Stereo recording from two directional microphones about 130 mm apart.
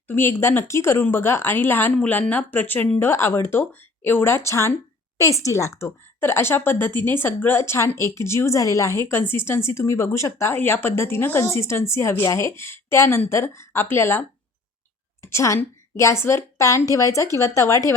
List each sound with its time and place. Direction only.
0.1 s a woman's voice: 15° left (ahead or behind)